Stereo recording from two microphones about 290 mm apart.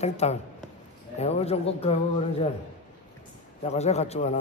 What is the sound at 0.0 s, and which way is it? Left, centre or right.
A man's voice, left.